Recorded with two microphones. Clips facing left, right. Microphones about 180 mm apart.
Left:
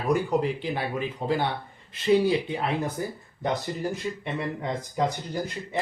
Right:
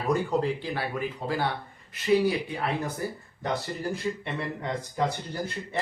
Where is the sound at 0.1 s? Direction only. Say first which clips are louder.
Left 2 dB; 15° left (ahead or behind).